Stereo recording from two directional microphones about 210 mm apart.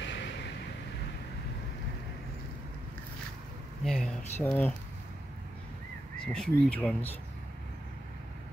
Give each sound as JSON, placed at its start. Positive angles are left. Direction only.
{"t": 0.0, "sound": "vehicle", "side_deg": 60}
{"t": 3.8, "sound": "speech", "side_deg": 5}
{"t": 6.2, "sound": "speech", "side_deg": 5}